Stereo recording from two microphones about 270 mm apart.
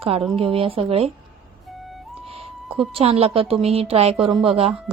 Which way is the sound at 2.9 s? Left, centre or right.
Right.